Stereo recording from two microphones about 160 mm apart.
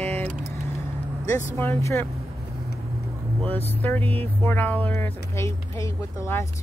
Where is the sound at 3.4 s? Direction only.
10° left (ahead or behind).